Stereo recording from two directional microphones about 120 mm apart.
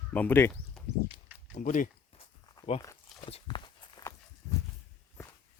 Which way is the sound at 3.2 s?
45° left (ahead or behind).